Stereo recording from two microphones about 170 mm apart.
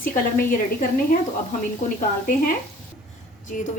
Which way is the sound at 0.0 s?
55° left (ahead or behind).